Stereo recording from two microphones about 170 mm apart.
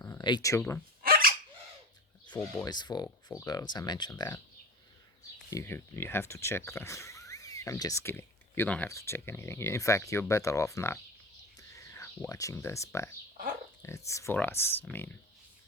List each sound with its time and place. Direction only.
0.0 s speech: 20° left (ahead or behind)
1.0 s hiccup: 60° right (ahead or behind)
2.3 s speech: 20° left (ahead or behind)
5.5 s speech: 15° left (ahead or behind)
11.5 s whispering: 20° left (ahead or behind)
14.1 s speech: 15° left (ahead or behind)